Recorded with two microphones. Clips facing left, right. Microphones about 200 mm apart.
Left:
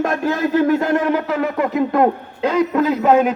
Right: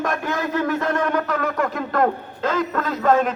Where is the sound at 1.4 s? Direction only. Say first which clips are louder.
Left 5 dB; 5° left (ahead or behind).